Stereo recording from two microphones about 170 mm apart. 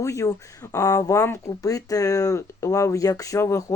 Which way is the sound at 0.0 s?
20° left (ahead or behind).